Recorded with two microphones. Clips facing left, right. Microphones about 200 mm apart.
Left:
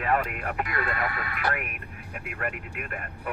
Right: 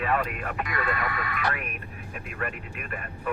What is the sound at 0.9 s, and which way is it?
Speech, 30° left (ahead or behind).